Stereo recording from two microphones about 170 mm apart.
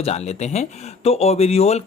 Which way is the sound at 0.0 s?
40° left (ahead or behind).